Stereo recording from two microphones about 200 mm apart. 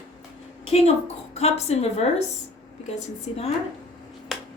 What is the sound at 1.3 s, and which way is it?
Speech, 30° left (ahead or behind).